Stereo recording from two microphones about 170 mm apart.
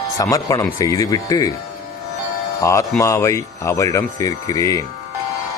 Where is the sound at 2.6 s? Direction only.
15° left (ahead or behind).